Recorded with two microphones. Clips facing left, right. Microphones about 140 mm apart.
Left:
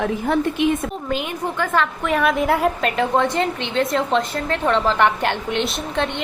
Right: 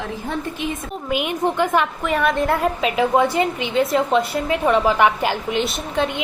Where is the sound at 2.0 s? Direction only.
Centre (ahead or behind).